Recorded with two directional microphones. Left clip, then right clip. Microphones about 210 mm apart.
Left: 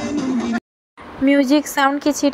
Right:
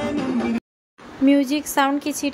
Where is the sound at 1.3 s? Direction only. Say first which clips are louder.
Left 4 dB; 15° left (ahead or behind).